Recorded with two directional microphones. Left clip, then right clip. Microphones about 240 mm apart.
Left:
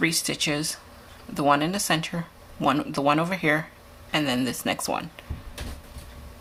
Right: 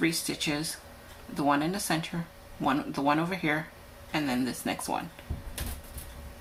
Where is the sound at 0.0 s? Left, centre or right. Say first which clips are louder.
Left 5 dB; left.